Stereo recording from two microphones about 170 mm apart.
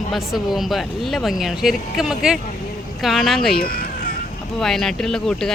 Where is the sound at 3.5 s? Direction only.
60° left (ahead or behind).